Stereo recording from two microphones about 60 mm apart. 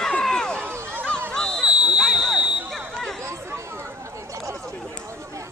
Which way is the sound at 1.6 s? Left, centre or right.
Centre.